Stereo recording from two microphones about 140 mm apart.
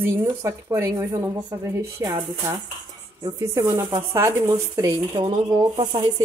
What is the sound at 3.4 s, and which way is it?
Speech, 20° right (ahead or behind).